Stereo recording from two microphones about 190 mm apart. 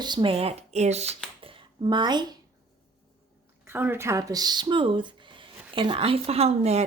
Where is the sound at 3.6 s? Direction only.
10° right (ahead or behind); by 6.8 s 35° right (ahead or behind).